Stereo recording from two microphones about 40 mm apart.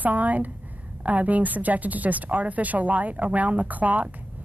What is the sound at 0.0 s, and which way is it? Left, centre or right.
Speech, right.